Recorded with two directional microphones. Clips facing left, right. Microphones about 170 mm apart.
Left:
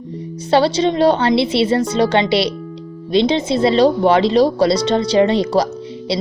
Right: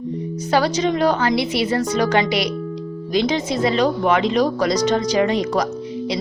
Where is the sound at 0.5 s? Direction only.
30° left (ahead or behind).